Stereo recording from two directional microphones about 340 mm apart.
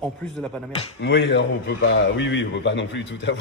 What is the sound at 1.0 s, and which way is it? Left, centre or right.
A man's voice, left.